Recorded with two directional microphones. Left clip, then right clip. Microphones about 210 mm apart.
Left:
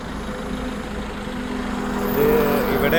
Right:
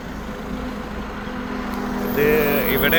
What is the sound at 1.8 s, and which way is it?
Vehicle, 35° right (ahead or behind).